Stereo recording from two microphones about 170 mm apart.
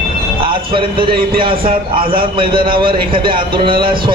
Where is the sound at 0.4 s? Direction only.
30° right (ahead or behind).